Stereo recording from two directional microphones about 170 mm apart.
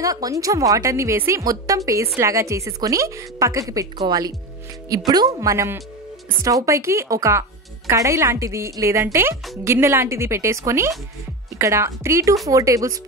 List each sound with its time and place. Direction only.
0.0 s a woman's voice: 20° right (ahead or behind)